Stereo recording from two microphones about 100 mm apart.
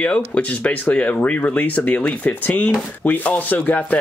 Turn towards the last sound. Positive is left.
turn(degrees=15)  # may be behind; listen again after turning